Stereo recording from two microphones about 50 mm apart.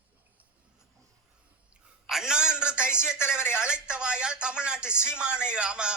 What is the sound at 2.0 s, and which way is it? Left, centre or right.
A man's voice, centre.